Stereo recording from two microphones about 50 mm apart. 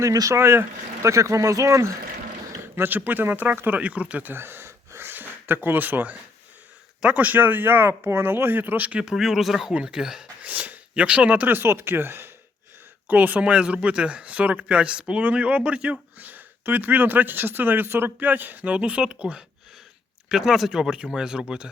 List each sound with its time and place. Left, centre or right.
0.3 s speech: right
1.0 s speech: right
2.7 s speech: right
3.7 s speech: right
4.3 s speech: right
4.9 s a sound: right
7.0 s speech: right
8.9 s speech: right
9.1 s speech: centre
10.4 s a sound: right
11.4 s speech: right
13.1 s speech: right
13.4 s speech: right
20.3 s speech: centre